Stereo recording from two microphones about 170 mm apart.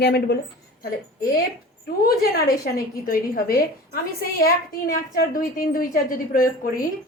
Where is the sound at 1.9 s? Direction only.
60° left (ahead or behind).